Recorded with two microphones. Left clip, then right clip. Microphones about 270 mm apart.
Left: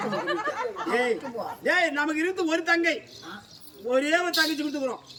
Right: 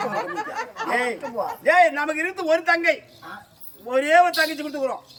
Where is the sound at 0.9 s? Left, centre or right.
Centre.